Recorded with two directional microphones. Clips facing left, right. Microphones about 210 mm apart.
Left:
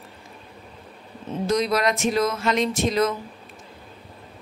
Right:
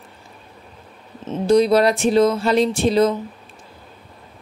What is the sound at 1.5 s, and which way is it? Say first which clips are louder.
Speech: right 8 dB; 30° right (ahead or behind).